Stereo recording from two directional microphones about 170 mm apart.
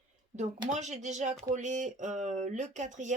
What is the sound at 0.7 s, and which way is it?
Speech, 45° right (ahead or behind).